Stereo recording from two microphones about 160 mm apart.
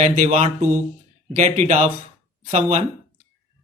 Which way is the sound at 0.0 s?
45° right (ahead or behind).